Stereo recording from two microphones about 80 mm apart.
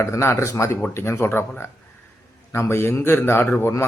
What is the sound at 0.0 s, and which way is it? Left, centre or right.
A man's voice, left.